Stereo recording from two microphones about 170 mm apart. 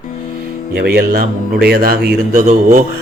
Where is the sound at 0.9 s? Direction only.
60° right (ahead or behind).